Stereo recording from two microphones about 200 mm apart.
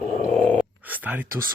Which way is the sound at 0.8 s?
10° right (ahead or behind).